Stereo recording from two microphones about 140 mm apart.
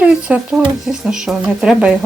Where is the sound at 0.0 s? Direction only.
10° right (ahead or behind).